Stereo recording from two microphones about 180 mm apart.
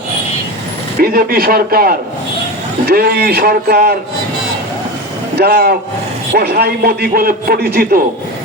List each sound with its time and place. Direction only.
1.0 s a man's voice: 55° right (ahead or behind)
5.4 s a man's voice: 60° right (ahead or behind)